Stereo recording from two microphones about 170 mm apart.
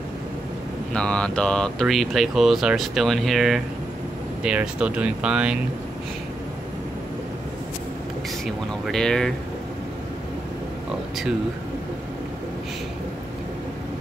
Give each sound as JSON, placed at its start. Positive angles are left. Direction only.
{"t": 0.9, "sound": "speech", "side_deg": 5}
{"t": 8.5, "sound": "speech", "side_deg": 0}